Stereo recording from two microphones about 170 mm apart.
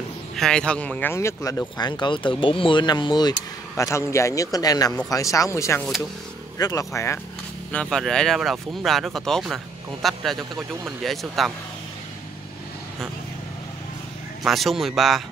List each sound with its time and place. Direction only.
0.4 s speech: 5° left (ahead or behind)
7.7 s speech: 5° left (ahead or behind)
14.4 s speech: centre (ahead or behind)